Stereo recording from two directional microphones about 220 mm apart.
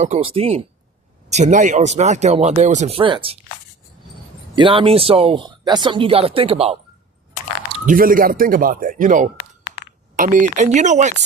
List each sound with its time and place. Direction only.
0.0 s speech: 30° right (ahead or behind)
4.5 s speech: 25° right (ahead or behind)
7.9 s speech: 40° right (ahead or behind)